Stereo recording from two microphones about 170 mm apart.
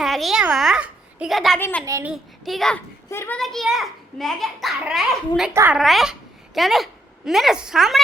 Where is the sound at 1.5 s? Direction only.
10° left (ahead or behind).